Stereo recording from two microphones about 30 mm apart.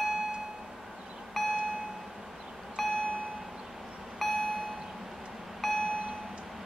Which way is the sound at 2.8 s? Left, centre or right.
Centre.